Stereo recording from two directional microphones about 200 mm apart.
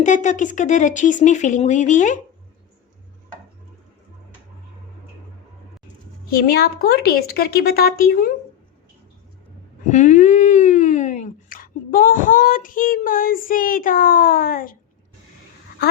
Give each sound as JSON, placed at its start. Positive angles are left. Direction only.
{"t": 0.0, "sound": "speech", "side_deg": 40}
{"t": 6.3, "sound": "speech", "side_deg": 50}
{"t": 9.9, "sound": "speech", "side_deg": 35}